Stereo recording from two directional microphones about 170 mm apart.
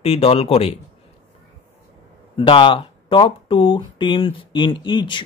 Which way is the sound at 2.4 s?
30° left (ahead or behind).